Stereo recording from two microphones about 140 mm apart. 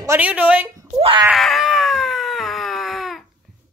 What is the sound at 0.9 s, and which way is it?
Speech, 40° right (ahead or behind).